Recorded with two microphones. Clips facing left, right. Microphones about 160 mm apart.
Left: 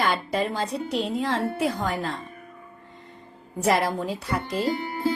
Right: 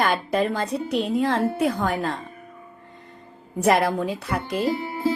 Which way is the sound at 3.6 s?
60° right (ahead or behind).